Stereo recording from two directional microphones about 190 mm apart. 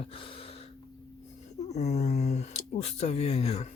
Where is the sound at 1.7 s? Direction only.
35° left (ahead or behind).